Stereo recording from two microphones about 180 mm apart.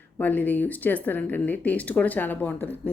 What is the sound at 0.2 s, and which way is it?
Speech, 10° left (ahead or behind).